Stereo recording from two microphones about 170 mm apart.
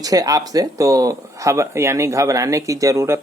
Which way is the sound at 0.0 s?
20° right (ahead or behind).